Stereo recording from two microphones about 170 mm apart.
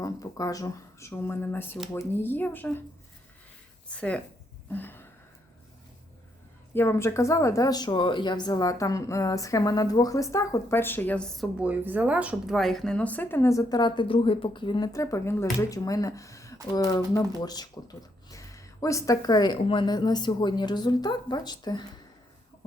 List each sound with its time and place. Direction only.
0.0 s speech: 20° left (ahead or behind)
3.8 s speech: 5° left (ahead or behind)
4.7 s a sound: 10° left (ahead or behind)
6.7 s speech: 15° left (ahead or behind)
11.6 s speech: 10° right (ahead or behind); by 21.8 s 25° left (ahead or behind)